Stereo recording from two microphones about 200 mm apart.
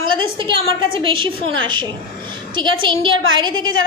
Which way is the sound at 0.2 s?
25° right (ahead or behind).